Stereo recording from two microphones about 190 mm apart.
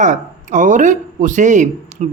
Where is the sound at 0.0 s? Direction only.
40° right (ahead or behind).